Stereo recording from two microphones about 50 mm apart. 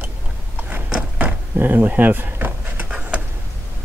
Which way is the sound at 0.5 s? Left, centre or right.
Right.